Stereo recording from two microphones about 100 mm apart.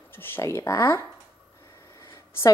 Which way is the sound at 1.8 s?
25° left (ahead or behind).